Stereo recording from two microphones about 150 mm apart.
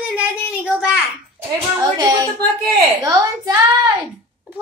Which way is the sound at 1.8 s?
25° right (ahead or behind).